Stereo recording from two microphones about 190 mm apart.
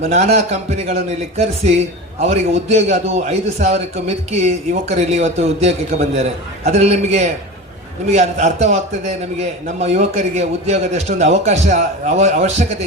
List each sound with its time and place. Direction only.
0.1 s a man's voice: 35° right (ahead or behind)